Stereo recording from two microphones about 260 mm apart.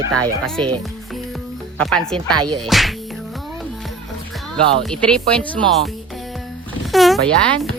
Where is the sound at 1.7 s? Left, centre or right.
Centre.